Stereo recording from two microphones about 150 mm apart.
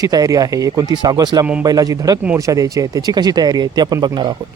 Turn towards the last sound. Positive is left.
turn(degrees=-30)  # may be behind; listen again after turning